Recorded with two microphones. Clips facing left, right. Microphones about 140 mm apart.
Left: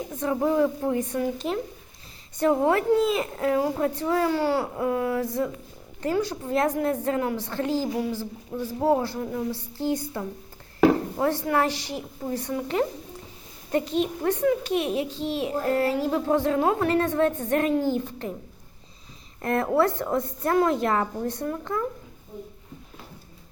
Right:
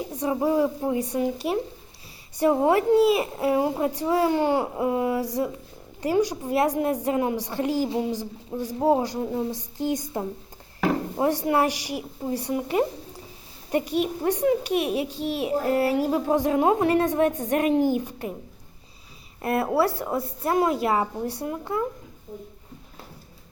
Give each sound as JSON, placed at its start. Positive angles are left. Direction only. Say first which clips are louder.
{"t": 0.1, "sound": "a child's voice", "louder": "even", "side_deg": -15}
{"t": 7.9, "sound": "a child's voice", "louder": "right 1 dB", "side_deg": -25}
{"t": 19.4, "sound": "a child's voice", "louder": "even", "side_deg": -10}